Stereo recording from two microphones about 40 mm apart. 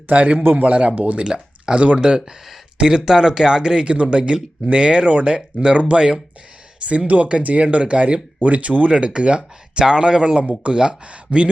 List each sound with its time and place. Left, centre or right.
0.1 s speech: right
1.2 s speech: right
7.1 s speech: right